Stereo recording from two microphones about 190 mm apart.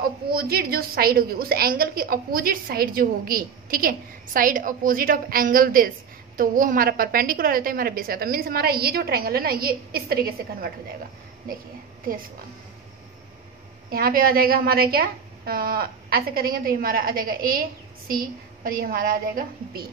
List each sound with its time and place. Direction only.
0.0 s a woman's voice: 55° right (ahead or behind)
13.8 s a woman's voice: 50° right (ahead or behind)